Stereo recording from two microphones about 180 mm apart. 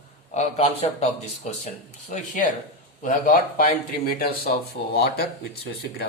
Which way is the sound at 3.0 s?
50° left (ahead or behind).